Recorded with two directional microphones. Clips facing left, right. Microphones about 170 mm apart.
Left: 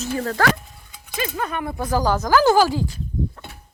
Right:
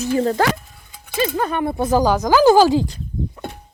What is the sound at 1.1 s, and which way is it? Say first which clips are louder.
Speech: right 6 dB; 30° right (ahead or behind).